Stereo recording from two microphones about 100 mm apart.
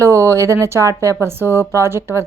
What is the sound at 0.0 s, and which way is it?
A woman's voice, 30° right (ahead or behind).